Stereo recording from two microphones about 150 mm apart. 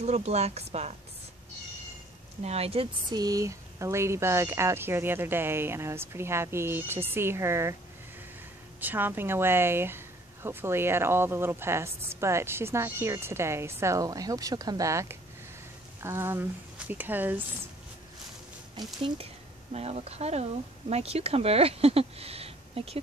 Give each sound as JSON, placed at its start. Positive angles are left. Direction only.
{"t": 0.0, "sound": "speech", "side_deg": -45}
{"t": 2.4, "sound": "speech", "side_deg": -45}
{"t": 3.1, "sound": "speech", "side_deg": -25}
{"t": 8.8, "sound": "speech", "side_deg": -15}
{"t": 18.8, "sound": "speech", "side_deg": -30}
{"t": 19.7, "sound": "speech", "side_deg": -45}